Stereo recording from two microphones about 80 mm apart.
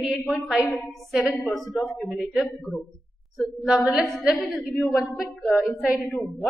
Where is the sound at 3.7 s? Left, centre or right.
Centre.